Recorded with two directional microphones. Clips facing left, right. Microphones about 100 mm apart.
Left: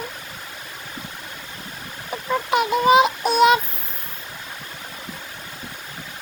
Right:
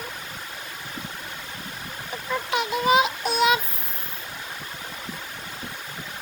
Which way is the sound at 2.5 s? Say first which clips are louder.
Left 5 dB; 45° left (ahead or behind).